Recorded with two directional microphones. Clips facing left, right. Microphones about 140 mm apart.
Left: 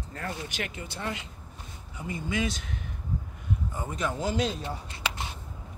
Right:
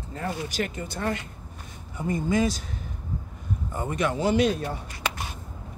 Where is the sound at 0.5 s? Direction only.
40° right (ahead or behind).